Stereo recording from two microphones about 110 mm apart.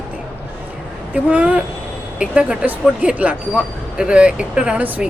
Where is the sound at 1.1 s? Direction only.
15° right (ahead or behind).